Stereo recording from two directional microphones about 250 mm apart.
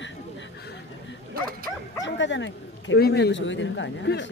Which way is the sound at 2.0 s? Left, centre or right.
Left.